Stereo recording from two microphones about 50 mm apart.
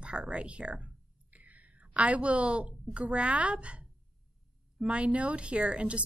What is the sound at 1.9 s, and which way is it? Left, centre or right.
A woman's voice, right.